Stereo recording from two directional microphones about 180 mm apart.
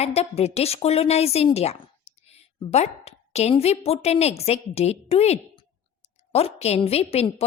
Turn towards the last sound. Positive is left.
turn(degrees=35)  # may be behind; listen again after turning